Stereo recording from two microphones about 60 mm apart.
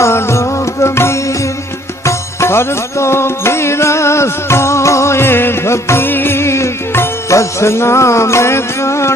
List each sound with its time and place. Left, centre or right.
0.0 s music: left